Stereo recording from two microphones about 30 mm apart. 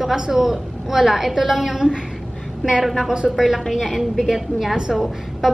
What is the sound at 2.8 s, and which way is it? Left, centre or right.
Speech, centre.